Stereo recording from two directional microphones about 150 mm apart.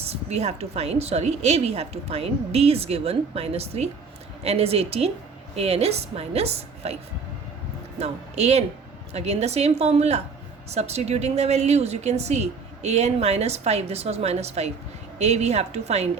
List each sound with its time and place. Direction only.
0.0 s a woman's voice: 45° right (ahead or behind)
7.9 s a woman's voice: 45° right (ahead or behind)